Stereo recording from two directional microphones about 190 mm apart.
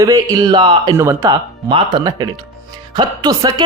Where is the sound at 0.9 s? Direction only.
15° right (ahead or behind).